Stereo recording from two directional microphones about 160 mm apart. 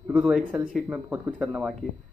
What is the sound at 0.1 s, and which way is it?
Speech, 10° right (ahead or behind).